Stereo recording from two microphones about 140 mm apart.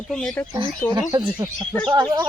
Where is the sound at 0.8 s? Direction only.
15° left (ahead or behind).